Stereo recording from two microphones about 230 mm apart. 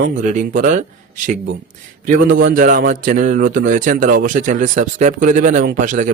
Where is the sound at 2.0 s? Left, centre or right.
Right.